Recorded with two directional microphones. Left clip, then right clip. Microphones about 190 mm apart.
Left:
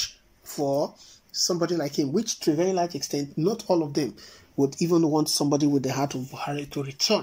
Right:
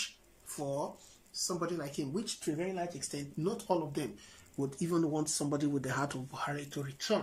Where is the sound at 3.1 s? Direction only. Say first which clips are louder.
Left 11 dB; 25° left (ahead or behind).